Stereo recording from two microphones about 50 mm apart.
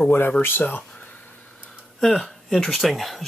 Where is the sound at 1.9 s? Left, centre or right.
Centre.